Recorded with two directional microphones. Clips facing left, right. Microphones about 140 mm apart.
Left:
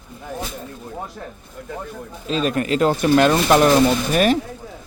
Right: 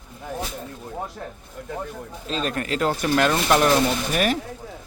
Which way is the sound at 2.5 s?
20° left (ahead or behind).